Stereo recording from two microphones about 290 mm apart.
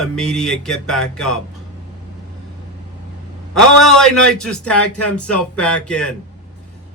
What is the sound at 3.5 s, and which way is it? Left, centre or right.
Speech, centre.